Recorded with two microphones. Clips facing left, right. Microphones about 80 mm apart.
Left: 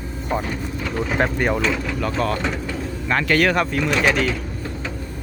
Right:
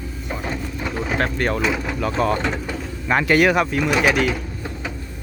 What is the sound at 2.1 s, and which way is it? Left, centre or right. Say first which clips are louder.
Speech: right 3 dB; centre.